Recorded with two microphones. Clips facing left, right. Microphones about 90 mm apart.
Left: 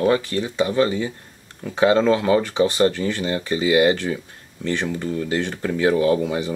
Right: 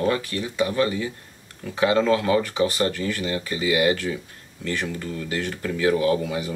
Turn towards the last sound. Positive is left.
turn(degrees=25)  # may be behind; listen again after turning